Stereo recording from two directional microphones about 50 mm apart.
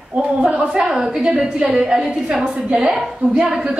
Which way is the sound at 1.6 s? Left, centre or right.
Right.